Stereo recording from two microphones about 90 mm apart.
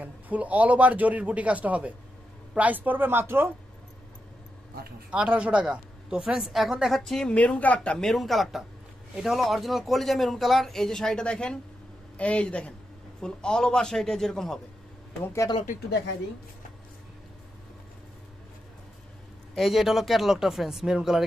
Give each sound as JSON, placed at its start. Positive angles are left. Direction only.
{"t": 0.0, "sound": "speech", "side_deg": -15}
{"t": 5.1, "sound": "speech", "side_deg": -15}
{"t": 7.3, "sound": "a man's voice", "side_deg": 15}
{"t": 19.5, "sound": "speech", "side_deg": 0}